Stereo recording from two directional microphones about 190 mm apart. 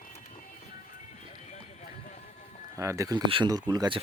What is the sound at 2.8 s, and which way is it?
Speech, 15° right (ahead or behind).